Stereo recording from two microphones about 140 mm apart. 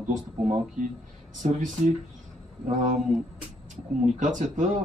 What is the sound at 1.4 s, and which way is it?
Speech, 60° right (ahead or behind).